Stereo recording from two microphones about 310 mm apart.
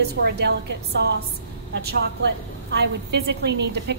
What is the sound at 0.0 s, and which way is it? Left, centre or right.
Speech, right.